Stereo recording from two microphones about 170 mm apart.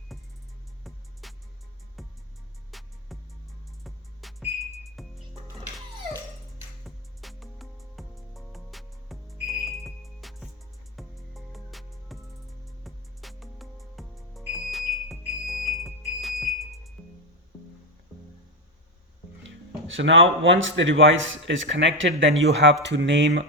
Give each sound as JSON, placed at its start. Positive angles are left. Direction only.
{"t": 0.1, "sound": "music", "side_deg": 0}
{"t": 6.8, "sound": "music", "side_deg": 0}
{"t": 20.0, "sound": "speech", "side_deg": -90}